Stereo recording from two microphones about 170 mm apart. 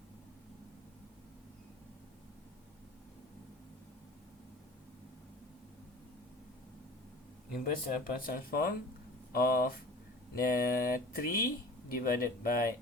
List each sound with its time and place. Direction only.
7.6 s speech: 55° left (ahead or behind)